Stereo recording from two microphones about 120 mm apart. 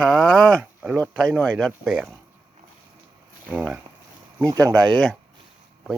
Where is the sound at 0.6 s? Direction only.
15° right (ahead or behind).